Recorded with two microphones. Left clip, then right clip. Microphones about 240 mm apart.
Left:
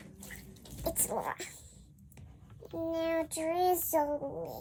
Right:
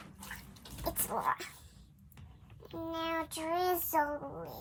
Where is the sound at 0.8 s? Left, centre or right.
Centre.